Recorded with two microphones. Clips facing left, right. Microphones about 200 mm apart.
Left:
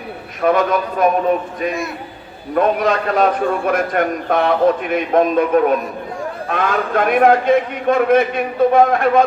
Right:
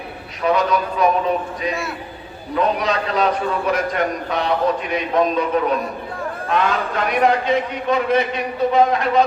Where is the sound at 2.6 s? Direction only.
50° left (ahead or behind).